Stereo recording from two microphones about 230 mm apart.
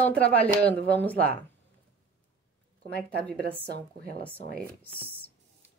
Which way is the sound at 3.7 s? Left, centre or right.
Right.